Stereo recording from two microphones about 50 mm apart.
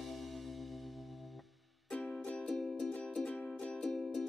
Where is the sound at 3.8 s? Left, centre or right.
Centre.